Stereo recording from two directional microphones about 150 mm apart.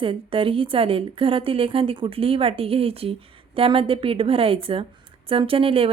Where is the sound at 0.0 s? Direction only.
35° right (ahead or behind).